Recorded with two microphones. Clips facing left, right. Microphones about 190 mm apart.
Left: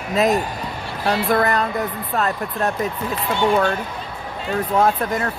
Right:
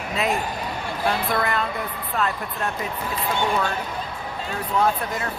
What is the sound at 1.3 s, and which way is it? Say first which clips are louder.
Speech: left 6 dB; 45° left (ahead or behind).